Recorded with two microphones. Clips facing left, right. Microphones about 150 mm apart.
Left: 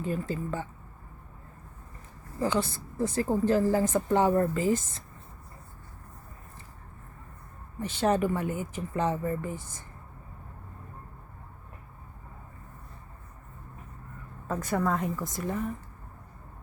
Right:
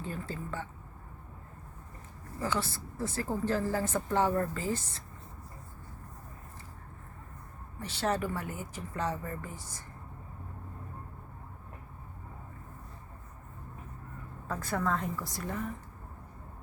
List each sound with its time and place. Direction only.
0.0 s speech: 15° left (ahead or behind)
2.4 s speech: 20° left (ahead or behind)
7.8 s speech: 15° left (ahead or behind)
14.4 s speech: 20° left (ahead or behind)